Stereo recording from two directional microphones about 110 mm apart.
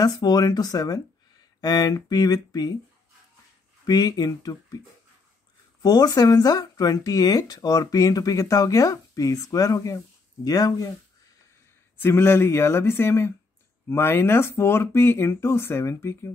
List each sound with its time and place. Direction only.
0.0 s speech: 35° left (ahead or behind)
3.8 s speech: 35° left (ahead or behind)
5.8 s speech: 35° left (ahead or behind)
12.0 s speech: 20° left (ahead or behind)